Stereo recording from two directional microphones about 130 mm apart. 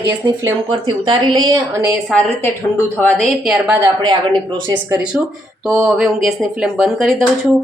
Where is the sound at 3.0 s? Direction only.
15° left (ahead or behind).